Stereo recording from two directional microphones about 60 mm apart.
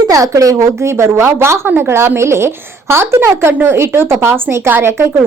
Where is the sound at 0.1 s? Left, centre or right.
Right.